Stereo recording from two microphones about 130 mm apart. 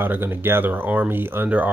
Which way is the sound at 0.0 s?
15° right (ahead or behind).